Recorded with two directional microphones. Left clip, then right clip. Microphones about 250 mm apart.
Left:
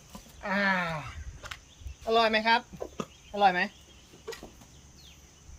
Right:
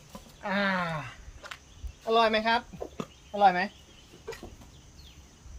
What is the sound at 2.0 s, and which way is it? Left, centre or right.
Speech, centre.